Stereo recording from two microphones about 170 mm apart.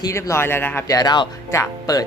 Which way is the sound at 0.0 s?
15° left (ahead or behind).